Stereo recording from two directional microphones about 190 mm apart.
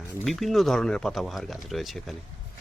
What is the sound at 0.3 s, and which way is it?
Speech, centre (ahead or behind).